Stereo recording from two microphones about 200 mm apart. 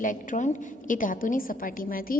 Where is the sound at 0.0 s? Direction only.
40° left (ahead or behind).